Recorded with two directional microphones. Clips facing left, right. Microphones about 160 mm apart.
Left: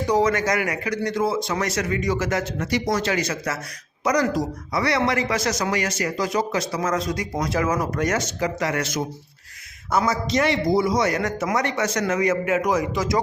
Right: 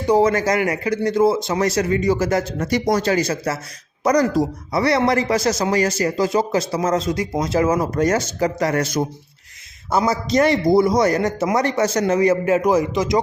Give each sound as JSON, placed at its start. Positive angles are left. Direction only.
{"t": 0.1, "sound": "a man's voice", "side_deg": -30}